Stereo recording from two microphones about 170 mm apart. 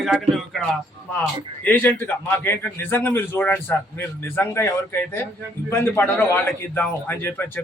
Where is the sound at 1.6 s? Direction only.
10° left (ahead or behind).